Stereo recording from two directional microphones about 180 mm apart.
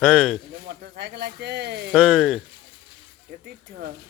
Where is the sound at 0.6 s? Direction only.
65° right (ahead or behind).